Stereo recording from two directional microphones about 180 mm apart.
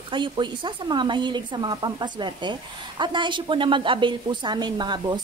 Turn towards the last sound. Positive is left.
turn(degrees=-25)  # may be behind; listen again after turning